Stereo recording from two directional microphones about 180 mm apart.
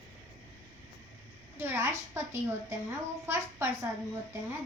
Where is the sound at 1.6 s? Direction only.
15° right (ahead or behind).